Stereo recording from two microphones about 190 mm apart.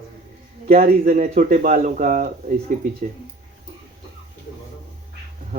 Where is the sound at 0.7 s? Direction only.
50° right (ahead or behind).